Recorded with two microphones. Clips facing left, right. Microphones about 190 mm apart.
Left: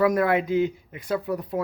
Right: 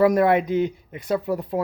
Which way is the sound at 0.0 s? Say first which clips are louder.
Right 4 dB; 25° right (ahead or behind).